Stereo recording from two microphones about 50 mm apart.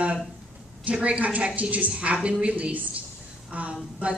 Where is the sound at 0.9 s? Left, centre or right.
Right.